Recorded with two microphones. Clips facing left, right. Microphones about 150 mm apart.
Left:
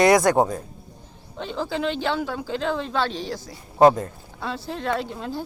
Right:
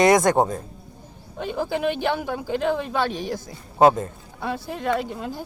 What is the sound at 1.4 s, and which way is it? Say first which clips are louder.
Speech: right 2 dB; 15° right (ahead or behind).